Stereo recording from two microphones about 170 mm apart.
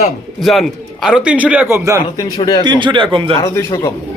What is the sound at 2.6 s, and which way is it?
Speech, 25° right (ahead or behind).